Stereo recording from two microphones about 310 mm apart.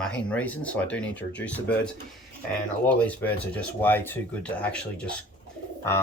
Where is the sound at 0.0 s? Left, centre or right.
Centre.